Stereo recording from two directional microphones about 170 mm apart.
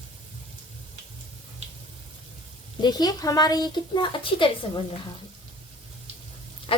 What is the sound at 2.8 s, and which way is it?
A woman's voice, 25° left (ahead or behind).